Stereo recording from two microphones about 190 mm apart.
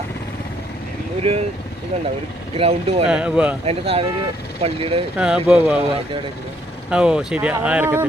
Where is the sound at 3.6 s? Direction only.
30° right (ahead or behind).